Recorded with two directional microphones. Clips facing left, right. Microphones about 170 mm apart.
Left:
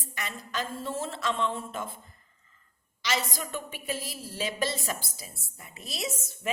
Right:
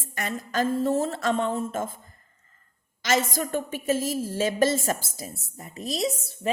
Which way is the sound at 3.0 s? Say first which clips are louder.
Right 7 dB; 45° right (ahead or behind).